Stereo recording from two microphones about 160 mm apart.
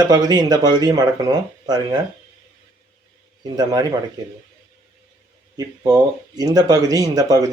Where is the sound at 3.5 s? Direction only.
25° right (ahead or behind).